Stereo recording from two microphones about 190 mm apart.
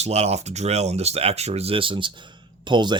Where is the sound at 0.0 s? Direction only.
35° right (ahead or behind).